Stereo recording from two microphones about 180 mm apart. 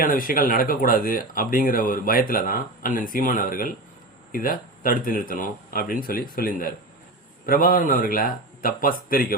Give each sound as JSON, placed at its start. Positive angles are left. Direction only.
{"t": 0.0, "sound": "speech", "side_deg": 50}